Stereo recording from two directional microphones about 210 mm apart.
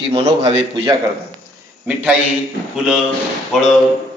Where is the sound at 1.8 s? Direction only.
5° right (ahead or behind).